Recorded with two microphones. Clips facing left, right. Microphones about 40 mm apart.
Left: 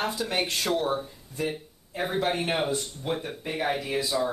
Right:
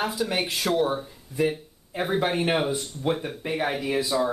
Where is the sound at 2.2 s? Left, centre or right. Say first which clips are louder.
Right 2 dB; centre.